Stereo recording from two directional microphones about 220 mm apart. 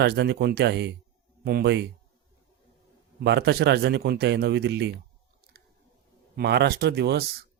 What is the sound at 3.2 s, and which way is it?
Speech, 50° right (ahead or behind).